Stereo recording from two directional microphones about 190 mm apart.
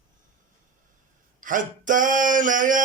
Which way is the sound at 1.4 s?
45° right (ahead or behind).